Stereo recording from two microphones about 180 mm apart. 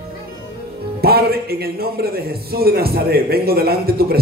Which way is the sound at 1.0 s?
60° right (ahead or behind).